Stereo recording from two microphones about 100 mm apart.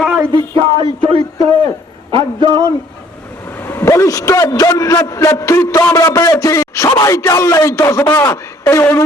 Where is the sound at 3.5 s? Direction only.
20° left (ahead or behind).